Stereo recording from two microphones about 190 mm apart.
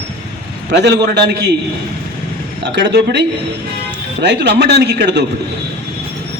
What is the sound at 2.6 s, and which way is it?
A man's voice, 65° right (ahead or behind).